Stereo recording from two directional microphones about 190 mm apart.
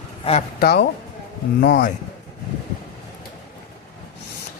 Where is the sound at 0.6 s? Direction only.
55° left (ahead or behind).